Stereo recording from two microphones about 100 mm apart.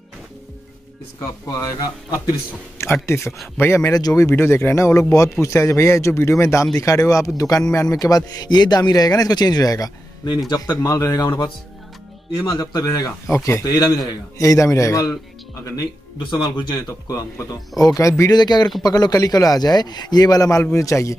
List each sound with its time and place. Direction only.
1.4 s a man's voice: 35° left (ahead or behind)
3.9 s a man's voice: 35° left (ahead or behind)
12.4 s speech: 35° left (ahead or behind)
16.4 s a man's voice: 45° left (ahead or behind)
17.1 s speech: 35° left (ahead or behind)
18.3 s a man's voice: 45° left (ahead or behind)